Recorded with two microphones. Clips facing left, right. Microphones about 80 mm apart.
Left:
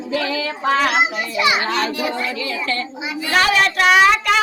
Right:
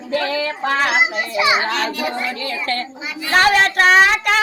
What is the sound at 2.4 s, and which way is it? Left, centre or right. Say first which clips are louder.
Speech: even; right.